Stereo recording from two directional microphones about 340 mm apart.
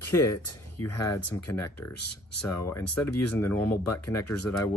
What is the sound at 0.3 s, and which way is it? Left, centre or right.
Speech, left.